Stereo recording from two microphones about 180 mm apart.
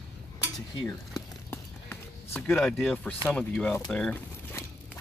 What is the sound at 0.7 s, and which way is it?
Speech, 15° left (ahead or behind).